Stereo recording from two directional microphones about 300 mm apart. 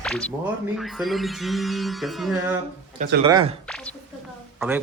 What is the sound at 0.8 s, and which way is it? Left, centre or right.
Speech, centre.